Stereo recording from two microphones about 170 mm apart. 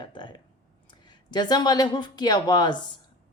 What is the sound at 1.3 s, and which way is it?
Speech, 25° left (ahead or behind).